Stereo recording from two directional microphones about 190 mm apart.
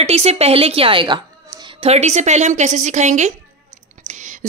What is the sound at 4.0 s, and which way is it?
Whispering, 40° right (ahead or behind).